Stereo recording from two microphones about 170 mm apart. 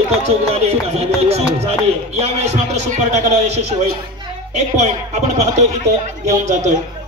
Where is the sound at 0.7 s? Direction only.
40° right (ahead or behind).